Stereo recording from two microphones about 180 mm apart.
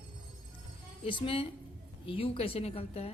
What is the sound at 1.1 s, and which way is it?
A woman's voice, 30° left (ahead or behind).